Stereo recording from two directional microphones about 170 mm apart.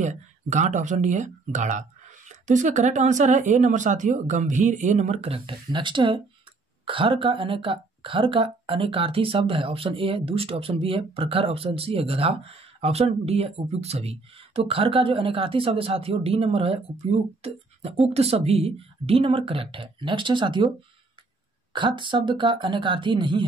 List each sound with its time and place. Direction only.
0.0 s a woman's voice: 45° right (ahead or behind); by 20.7 s 30° right (ahead or behind)
21.7 s speech: 30° right (ahead or behind)